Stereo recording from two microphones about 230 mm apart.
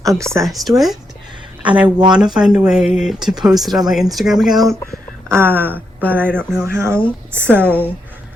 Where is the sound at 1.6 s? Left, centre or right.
Centre.